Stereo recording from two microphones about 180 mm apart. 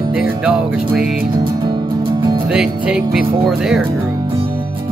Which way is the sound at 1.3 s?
25° right (ahead or behind).